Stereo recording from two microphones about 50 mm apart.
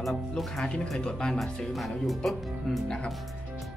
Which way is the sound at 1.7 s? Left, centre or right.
Centre.